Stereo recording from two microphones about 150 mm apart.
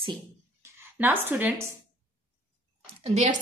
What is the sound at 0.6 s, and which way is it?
Speech, 10° right (ahead or behind).